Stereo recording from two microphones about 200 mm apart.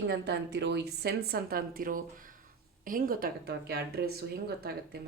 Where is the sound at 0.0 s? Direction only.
55° right (ahead or behind).